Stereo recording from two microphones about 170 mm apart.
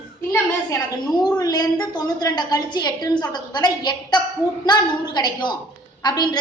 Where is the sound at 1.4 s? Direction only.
20° left (ahead or behind).